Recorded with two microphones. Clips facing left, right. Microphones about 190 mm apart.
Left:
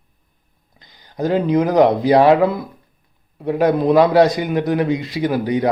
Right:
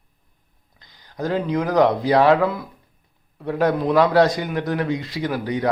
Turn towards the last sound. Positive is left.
turn(degrees=15)  # may be behind; listen again after turning